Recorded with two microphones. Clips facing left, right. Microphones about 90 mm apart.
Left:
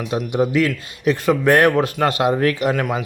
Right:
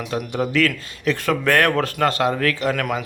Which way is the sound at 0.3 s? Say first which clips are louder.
Left 3 dB; 15° left (ahead or behind).